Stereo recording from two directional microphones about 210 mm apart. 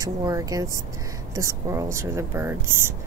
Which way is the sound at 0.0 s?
15° right (ahead or behind).